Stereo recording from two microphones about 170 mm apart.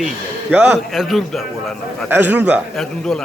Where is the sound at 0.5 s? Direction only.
10° right (ahead or behind).